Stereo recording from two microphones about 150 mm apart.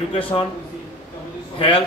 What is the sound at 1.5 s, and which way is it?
Speech, 35° left (ahead or behind).